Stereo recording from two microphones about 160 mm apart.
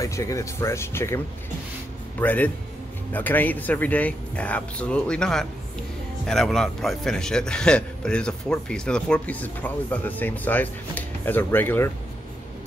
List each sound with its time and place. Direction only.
0.0 s a man's voice: 20° left (ahead or behind)